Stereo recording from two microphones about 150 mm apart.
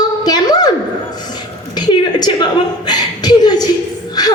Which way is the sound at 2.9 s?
25° left (ahead or behind).